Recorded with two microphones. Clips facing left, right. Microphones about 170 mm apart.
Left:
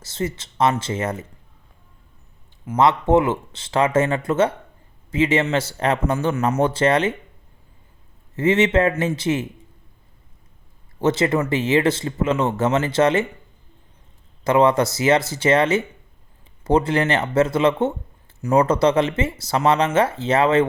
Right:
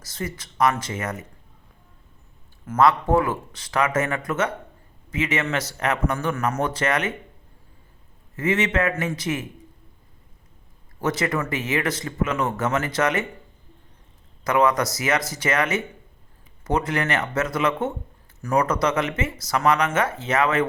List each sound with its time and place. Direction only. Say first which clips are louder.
0.0 s speech: left 6 dB; 25° left (ahead or behind)
2.6 s speech: left 2 dB; 20° left (ahead or behind)
8.4 s speech: left 5 dB; 30° left (ahead or behind)
11.0 s speech: left 5 dB; 25° left (ahead or behind)
14.4 s speech: left 4 dB; 30° left (ahead or behind)